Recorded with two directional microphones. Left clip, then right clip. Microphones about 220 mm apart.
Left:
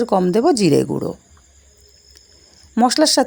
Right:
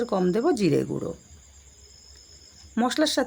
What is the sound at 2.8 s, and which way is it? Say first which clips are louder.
Speech: left 9 dB; 30° left (ahead or behind).